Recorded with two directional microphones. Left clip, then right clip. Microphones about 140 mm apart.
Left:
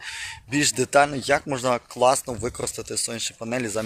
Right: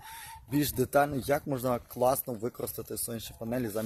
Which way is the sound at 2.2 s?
20° left (ahead or behind).